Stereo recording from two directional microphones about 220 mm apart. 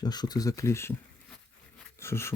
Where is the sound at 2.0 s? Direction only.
10° left (ahead or behind).